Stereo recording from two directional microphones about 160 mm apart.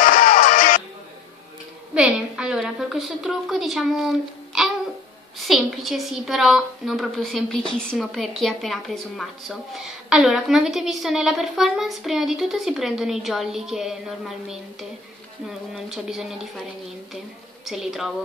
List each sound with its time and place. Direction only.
0.0 s music: 60° left (ahead or behind)
2.0 s a woman's voice: 5° right (ahead or behind)
17.6 s a woman's voice: 5° right (ahead or behind)